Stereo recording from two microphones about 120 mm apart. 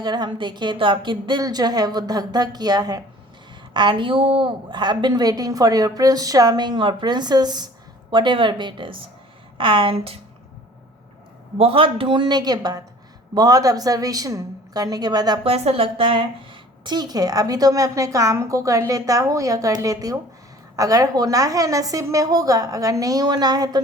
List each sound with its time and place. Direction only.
0.0 s a woman's voice: 40° right (ahead or behind); by 10.2 s 55° right (ahead or behind)
11.5 s a man's voice: 50° right (ahead or behind); by 15.4 s 35° right (ahead or behind)
15.4 s a woman's voice: 55° right (ahead or behind); by 23.8 s 35° right (ahead or behind)